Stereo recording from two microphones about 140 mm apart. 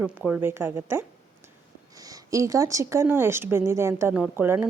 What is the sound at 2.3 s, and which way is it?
A woman's voice, 25° right (ahead or behind).